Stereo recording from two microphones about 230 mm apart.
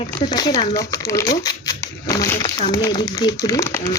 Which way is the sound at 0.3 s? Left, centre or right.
Centre.